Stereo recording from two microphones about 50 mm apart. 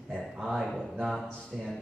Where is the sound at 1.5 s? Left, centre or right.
Centre.